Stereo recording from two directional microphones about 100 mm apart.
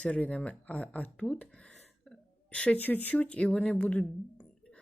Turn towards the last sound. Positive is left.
turn(degrees=10)  # may be behind; listen again after turning